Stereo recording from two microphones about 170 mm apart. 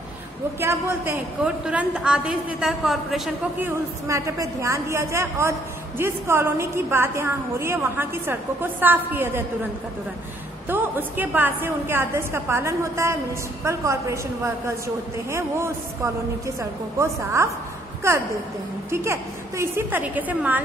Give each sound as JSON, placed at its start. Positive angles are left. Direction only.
{"t": 0.6, "sound": "a woman's voice", "side_deg": -15}
{"t": 3.5, "sound": "a woman's voice", "side_deg": -15}
{"t": 10.7, "sound": "a woman's voice", "side_deg": -10}